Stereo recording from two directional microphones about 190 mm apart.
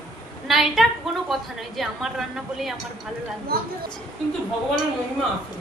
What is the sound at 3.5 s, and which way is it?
Speech, 55° right (ahead or behind).